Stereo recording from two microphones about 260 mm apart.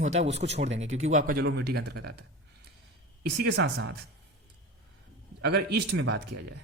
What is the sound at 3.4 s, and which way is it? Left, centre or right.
Speech, right.